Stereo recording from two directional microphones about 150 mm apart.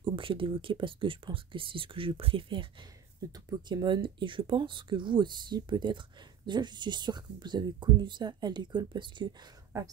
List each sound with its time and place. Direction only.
0.0 s speech: 35° right (ahead or behind)